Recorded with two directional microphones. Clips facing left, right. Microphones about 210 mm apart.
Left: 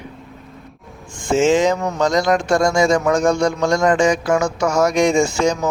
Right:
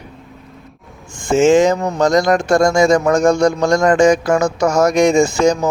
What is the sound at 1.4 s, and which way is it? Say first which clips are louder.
A man's voice: right 4 dB; 50° right (ahead or behind).